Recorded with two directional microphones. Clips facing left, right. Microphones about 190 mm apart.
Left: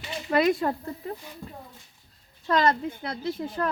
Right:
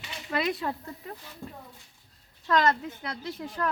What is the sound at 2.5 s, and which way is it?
Speech, 30° left (ahead or behind).